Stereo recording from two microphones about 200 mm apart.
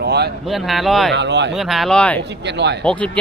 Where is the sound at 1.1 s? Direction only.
60° right (ahead or behind).